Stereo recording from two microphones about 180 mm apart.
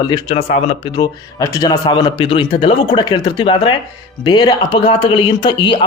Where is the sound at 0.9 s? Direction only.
20° left (ahead or behind).